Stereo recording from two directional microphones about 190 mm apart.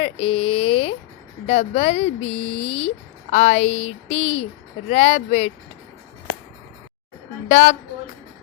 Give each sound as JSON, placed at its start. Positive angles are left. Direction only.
{"t": 0.0, "sound": "speech", "side_deg": 30}
{"t": 7.4, "sound": "a woman's voice", "side_deg": 40}